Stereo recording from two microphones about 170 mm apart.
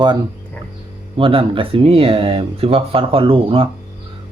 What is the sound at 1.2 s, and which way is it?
Speech, 30° right (ahead or behind).